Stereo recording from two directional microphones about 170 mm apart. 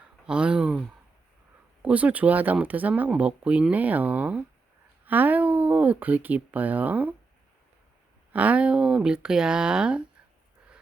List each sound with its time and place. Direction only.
0.3 s speech: 5° right (ahead or behind)
8.3 s speech: 10° right (ahead or behind)